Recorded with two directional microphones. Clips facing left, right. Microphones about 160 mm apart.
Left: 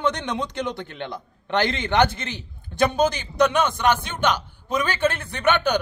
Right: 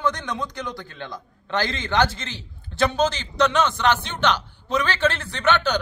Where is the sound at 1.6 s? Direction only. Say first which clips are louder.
Left 4 dB; 60° left (ahead or behind).